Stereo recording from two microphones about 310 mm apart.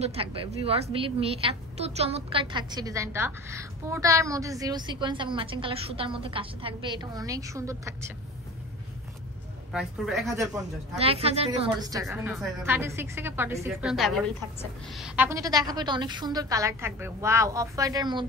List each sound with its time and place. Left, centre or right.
0.0 s a woman's voice: centre
9.7 s speech: centre
11.0 s a woman's voice: centre